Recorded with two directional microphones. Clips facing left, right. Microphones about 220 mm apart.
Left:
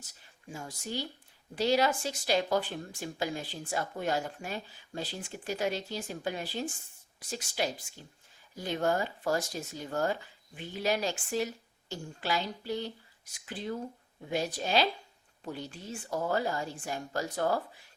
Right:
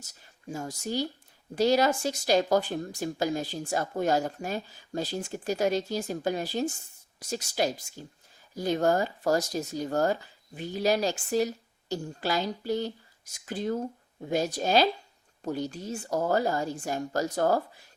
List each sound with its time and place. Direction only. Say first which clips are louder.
0.0 s speech: right 7 dB; 40° right (ahead or behind)